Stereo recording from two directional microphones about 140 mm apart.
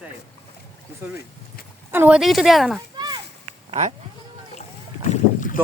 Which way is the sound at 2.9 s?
30° right (ahead or behind).